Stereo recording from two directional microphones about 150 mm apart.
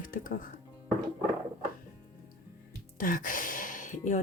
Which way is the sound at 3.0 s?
60° left (ahead or behind).